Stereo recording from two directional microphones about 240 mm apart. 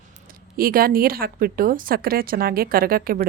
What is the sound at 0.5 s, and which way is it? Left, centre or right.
A woman's voice, right.